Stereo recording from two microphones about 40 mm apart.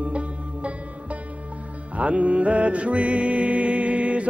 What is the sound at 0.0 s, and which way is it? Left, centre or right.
Music, right.